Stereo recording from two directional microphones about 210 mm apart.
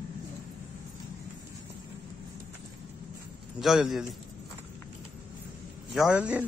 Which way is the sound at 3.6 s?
Centre (ahead or behind).